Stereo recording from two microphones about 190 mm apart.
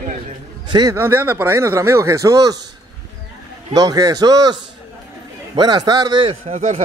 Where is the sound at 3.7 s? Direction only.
20° right (ahead or behind); by 6.8 s 35° right (ahead or behind).